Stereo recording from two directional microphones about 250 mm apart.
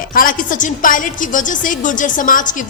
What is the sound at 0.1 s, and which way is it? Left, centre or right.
A woman's voice, left.